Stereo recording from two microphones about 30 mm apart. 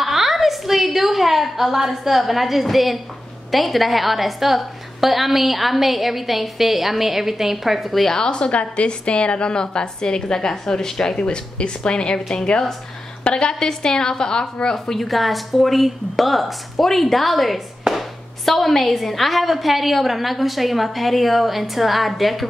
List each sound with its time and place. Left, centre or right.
0.0 s a sound: centre
3.5 s a woman's voice: centre
8.1 s a woman's voice: left
8.5 s a woman's voice: left; by 11.1 s centre
11.1 s a woman's voice: left
13.6 s a woman's voice: centre
15.0 s a woman's voice: centre
17.9 s a sound: centre
18.4 s a woman's voice: centre